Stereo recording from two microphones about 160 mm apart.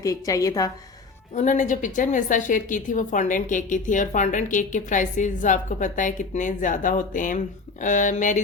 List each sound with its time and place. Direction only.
0.0 s a woman's voice: 20° left (ahead or behind)
1.4 s a woman's voice: 55° left (ahead or behind)